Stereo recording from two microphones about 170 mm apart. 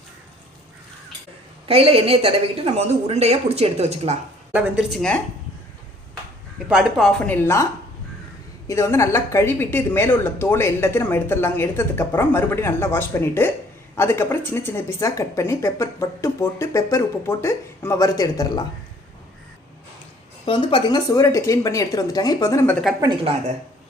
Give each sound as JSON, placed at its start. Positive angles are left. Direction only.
{"t": 1.6, "sound": "a woman's voice", "side_deg": -35}
{"t": 4.5, "sound": "speech", "side_deg": -5}
{"t": 6.7, "sound": "a woman's voice", "side_deg": -5}
{"t": 20.4, "sound": "speech", "side_deg": 30}